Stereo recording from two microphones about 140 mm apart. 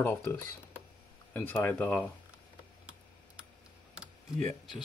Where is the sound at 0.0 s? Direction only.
15° left (ahead or behind).